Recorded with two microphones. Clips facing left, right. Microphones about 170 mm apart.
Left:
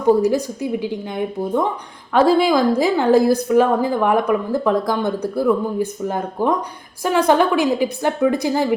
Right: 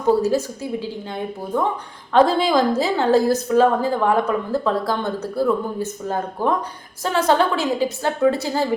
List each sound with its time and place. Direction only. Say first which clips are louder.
0.2 s a woman's voice: left 2 dB; 15° left (ahead or behind)